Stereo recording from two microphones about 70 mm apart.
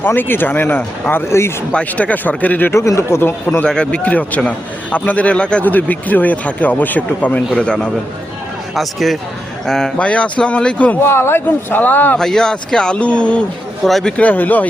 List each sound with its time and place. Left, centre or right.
0.0 s a man's voice: left
1.3 s speech: left
1.7 s a man's voice: centre
2.7 s a man's voice: left
3.6 s a man's voice: centre
7.5 s speech: centre
8.7 s speech: centre
10.0 s speech: centre
11.0 s speech: left
12.1 s speech: centre
13.8 s speech: centre
14.2 s a man's voice: left